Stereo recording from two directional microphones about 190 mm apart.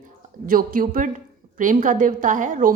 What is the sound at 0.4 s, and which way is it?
A woman's voice, 45° right (ahead or behind).